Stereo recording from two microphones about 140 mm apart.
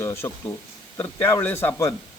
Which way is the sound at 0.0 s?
20° left (ahead or behind).